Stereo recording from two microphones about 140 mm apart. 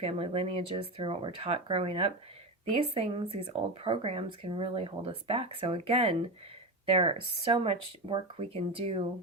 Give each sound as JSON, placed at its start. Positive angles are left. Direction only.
{"t": 0.0, "sound": "speech", "side_deg": -45}
{"t": 3.2, "sound": "speech", "side_deg": -40}